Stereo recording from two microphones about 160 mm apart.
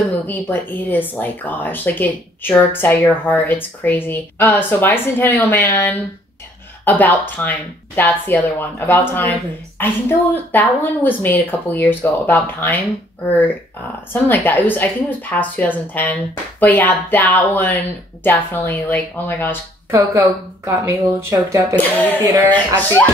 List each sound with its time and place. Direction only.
0.3 s speech: 10° left (ahead or behind)
14.3 s speech: 10° left (ahead or behind)
19.9 s speech: 15° right (ahead or behind)
21.7 s speech: 10° left (ahead or behind)
22.2 s speech: 20° right (ahead or behind)